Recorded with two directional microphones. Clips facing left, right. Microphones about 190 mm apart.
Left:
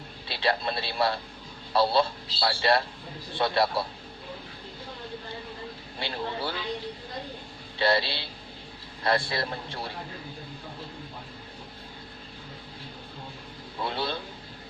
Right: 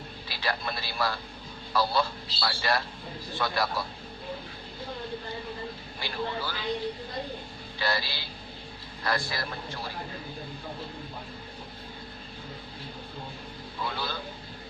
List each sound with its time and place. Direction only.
0.3 s a man's voice: 25° left (ahead or behind)
6.0 s a man's voice: 25° left (ahead or behind)
7.8 s a man's voice: 25° left (ahead or behind)
13.8 s a man's voice: 25° left (ahead or behind)